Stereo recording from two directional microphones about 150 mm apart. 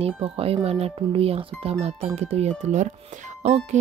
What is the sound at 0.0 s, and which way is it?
Speech, 40° right (ahead or behind).